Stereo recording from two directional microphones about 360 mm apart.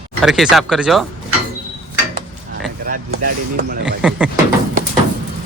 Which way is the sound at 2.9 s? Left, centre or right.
Right.